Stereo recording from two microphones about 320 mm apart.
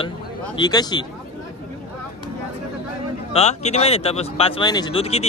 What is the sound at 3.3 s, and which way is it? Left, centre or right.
Speech, centre.